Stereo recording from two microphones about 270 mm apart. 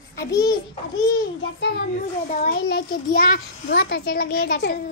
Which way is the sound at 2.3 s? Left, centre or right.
Left.